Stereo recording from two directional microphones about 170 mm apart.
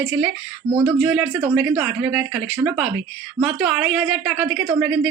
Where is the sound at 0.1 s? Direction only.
10° right (ahead or behind).